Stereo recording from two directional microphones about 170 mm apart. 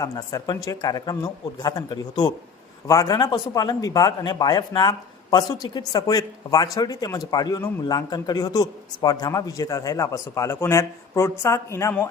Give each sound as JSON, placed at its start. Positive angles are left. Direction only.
{"t": 0.0, "sound": "speech", "side_deg": 20}